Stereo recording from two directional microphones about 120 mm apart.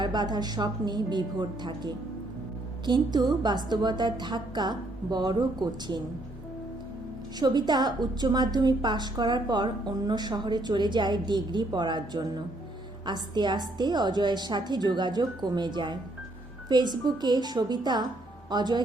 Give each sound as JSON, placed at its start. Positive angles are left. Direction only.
{"t": 0.0, "sound": "a woman's voice", "side_deg": -35}
{"t": 7.3, "sound": "a woman's voice", "side_deg": -35}